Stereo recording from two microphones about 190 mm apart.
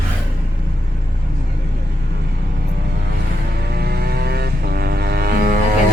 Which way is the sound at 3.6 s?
55° right (ahead or behind).